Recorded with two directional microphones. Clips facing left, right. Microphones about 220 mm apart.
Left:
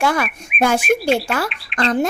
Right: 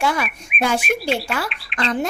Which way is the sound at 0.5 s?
Centre (ahead or behind).